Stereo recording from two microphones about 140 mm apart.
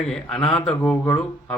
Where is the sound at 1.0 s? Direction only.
15° left (ahead or behind).